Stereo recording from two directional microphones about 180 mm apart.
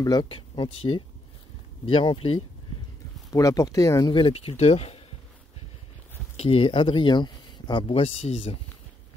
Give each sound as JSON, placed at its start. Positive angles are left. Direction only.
{"t": 0.0, "sound": "speech", "side_deg": 25}
{"t": 3.3, "sound": "speech", "side_deg": 20}
{"t": 6.3, "sound": "speech", "side_deg": 35}
{"t": 7.9, "sound": "speech", "side_deg": 35}